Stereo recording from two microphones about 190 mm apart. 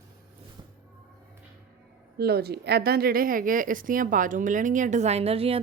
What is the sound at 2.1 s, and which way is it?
A woman's voice, 55° right (ahead or behind).